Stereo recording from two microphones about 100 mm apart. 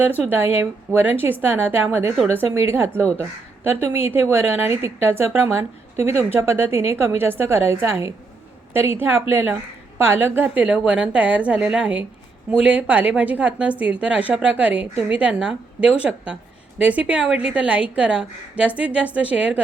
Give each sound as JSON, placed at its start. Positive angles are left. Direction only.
{"t": 0.0, "sound": "a woman's voice", "side_deg": -20}
{"t": 4.0, "sound": "a woman's voice", "side_deg": -20}